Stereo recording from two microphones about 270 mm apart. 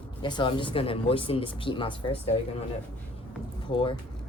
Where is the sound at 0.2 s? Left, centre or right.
Centre.